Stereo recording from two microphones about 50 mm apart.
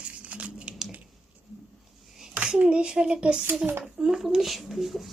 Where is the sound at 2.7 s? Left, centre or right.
Centre.